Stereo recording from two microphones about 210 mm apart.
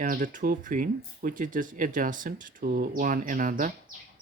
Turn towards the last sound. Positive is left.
turn(degrees=-40)  # may be behind; listen again after turning